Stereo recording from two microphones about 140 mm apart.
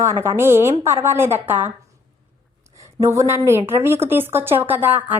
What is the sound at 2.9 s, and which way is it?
A woman's voice, 20° right (ahead or behind).